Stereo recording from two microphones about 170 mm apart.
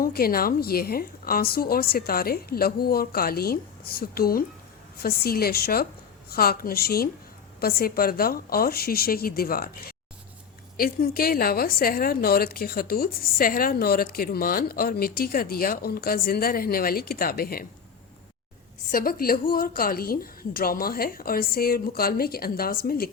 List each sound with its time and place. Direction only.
0.0 s a woman's voice: 60° left (ahead or behind)
18.9 s a woman's voice: 55° left (ahead or behind)